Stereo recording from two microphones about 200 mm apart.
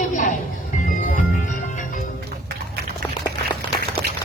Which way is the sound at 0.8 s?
40° left (ahead or behind).